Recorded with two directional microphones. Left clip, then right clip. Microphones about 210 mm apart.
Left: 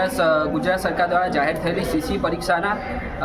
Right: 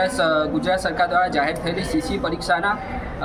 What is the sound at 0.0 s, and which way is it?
Speech, 5° left (ahead or behind).